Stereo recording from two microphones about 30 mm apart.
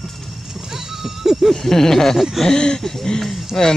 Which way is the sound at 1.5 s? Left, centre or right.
Centre.